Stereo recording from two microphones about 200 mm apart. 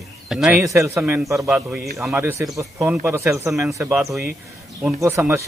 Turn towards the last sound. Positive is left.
turn(degrees=-15)  # may be behind; listen again after turning